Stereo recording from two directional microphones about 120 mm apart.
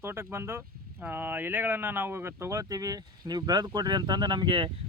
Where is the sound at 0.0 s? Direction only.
20° right (ahead or behind).